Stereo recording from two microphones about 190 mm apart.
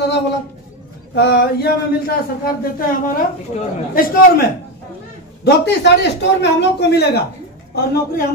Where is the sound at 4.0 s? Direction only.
45° left (ahead or behind).